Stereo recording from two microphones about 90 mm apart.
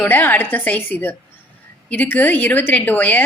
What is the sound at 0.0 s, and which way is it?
A woman's voice, 20° left (ahead or behind).